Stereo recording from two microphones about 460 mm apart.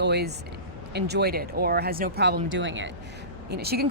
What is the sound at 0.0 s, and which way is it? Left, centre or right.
Speech, right.